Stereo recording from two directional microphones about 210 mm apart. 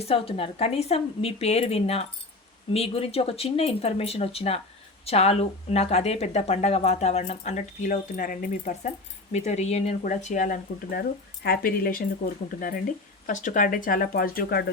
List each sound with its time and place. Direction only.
0.0 s speech: 25° left (ahead or behind); by 14.6 s 45° left (ahead or behind)